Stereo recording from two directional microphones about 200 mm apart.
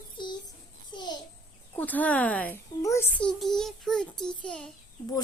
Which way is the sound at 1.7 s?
10° left (ahead or behind).